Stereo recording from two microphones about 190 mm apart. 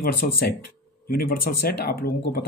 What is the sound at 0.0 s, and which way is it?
Speech, 55° left (ahead or behind).